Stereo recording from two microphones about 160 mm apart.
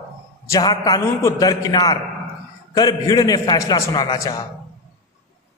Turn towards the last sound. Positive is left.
turn(degrees=25)  # may be behind; listen again after turning